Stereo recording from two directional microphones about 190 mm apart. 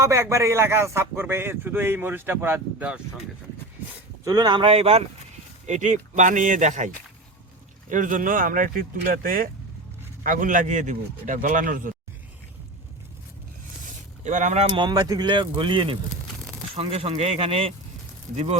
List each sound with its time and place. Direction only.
0.0 s a man's voice: 15° right (ahead or behind)
4.2 s speech: 20° right (ahead or behind); by 11.9 s 45° right (ahead or behind)
14.3 s speech: 40° right (ahead or behind)